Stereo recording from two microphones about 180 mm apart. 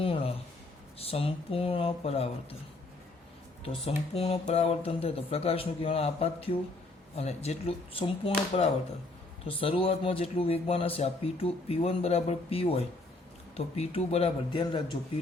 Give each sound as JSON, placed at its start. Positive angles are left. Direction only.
{"t": 0.0, "sound": "a sound", "side_deg": 30}
{"t": 0.9, "sound": "speech", "side_deg": 35}
{"t": 3.6, "sound": "speech", "side_deg": 35}